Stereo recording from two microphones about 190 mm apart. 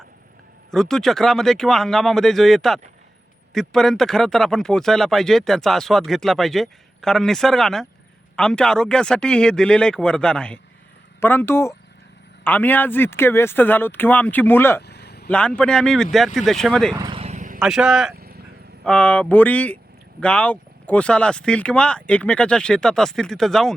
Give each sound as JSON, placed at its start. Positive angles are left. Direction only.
{"t": 0.7, "sound": "speech", "side_deg": 0}
{"t": 14.8, "sound": "a sound", "side_deg": 60}
{"t": 15.3, "sound": "speech", "side_deg": 5}
{"t": 16.9, "sound": "speech", "side_deg": -20}
{"t": 17.2, "sound": "vehicle", "side_deg": -35}
{"t": 17.6, "sound": "speech", "side_deg": -5}
{"t": 18.1, "sound": "a sound", "side_deg": -55}
{"t": 18.9, "sound": "speech", "side_deg": 5}